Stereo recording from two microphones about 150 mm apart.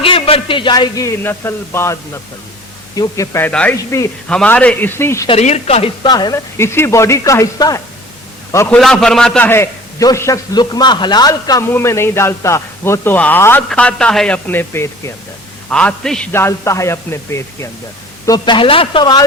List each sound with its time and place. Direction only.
0.0 s a man's voice: 40° left (ahead or behind); by 5.3 s 20° left (ahead or behind)
5.3 s a woman's voice: 45° left (ahead or behind)
6.1 s a man's voice: 25° left (ahead or behind)
8.8 s a man's voice: 5° left (ahead or behind)
9.5 s a man's voice: 20° left (ahead or behind)
16.3 s a man's voice: 15° left (ahead or behind)
18.3 s speech: 30° left (ahead or behind)